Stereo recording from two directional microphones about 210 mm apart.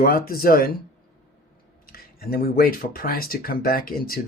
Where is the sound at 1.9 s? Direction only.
45° left (ahead or behind).